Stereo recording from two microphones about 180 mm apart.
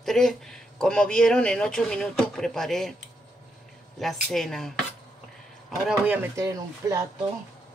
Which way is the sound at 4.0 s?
Centre (ahead or behind).